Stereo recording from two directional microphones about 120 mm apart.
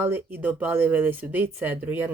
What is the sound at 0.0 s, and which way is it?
Speech, 15° right (ahead or behind).